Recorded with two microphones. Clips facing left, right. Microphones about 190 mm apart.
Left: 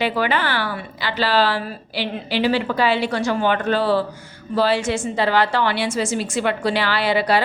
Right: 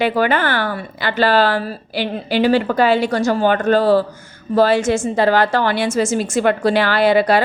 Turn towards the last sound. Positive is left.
turn(degrees=-50)  # may be behind; listen again after turning